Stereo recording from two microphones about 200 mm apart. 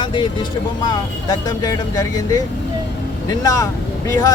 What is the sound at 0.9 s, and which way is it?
Speech, 20° left (ahead or behind).